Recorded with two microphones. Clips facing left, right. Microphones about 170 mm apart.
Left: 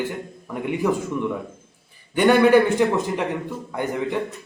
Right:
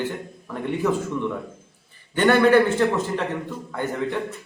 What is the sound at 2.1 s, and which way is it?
A man's voice, 10° left (ahead or behind).